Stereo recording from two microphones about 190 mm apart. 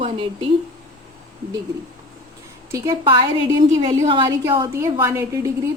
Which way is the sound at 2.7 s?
15° right (ahead or behind).